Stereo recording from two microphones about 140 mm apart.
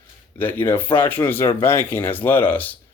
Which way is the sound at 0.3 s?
15° left (ahead or behind).